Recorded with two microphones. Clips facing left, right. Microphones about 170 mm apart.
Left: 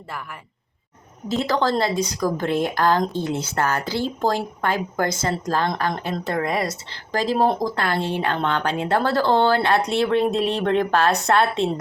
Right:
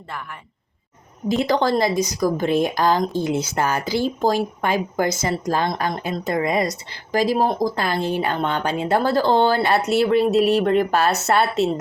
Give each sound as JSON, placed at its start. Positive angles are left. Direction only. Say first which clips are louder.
{"t": 1.3, "sound": "speech", "louder": "right 2 dB", "side_deg": -15}